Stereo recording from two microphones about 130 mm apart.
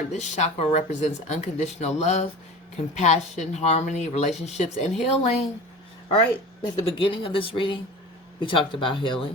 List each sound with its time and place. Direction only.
0.1 s speech: 65° left (ahead or behind)
6.6 s speech: 40° left (ahead or behind)